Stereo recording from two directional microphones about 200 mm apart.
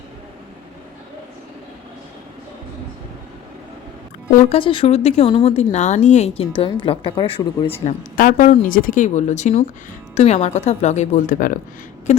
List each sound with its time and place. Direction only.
4.4 s a woman's voice: 25° left (ahead or behind)
7.9 s speech: 45° left (ahead or behind)